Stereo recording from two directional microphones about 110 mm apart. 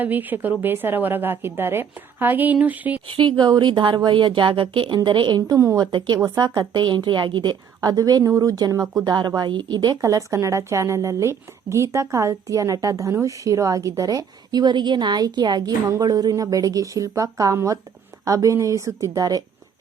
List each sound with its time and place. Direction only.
0.0 s a woman's voice: 15° right (ahead or behind)
3.1 s speech: 45° right (ahead or behind)
7.8 s speech: 35° right (ahead or behind)
10.0 s a woman's voice: 30° right (ahead or behind)